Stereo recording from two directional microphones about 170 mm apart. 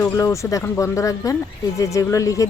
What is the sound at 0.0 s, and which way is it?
Speech, 15° left (ahead or behind).